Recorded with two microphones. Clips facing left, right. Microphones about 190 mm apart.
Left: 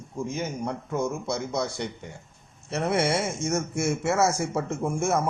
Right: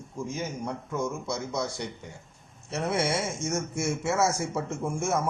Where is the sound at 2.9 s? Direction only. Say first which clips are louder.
Left 3 dB; 60° left (ahead or behind).